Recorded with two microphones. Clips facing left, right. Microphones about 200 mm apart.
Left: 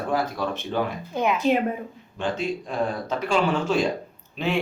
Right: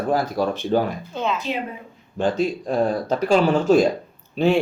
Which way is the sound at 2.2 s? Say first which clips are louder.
Right 5 dB; 40° right (ahead or behind).